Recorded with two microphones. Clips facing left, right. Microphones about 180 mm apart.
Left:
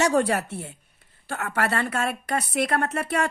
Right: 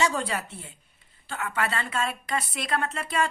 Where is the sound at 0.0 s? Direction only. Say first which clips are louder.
Left 6 dB; 65° left (ahead or behind).